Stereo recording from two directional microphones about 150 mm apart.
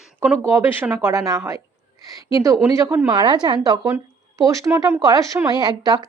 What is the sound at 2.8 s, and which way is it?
Speech, 20° right (ahead or behind).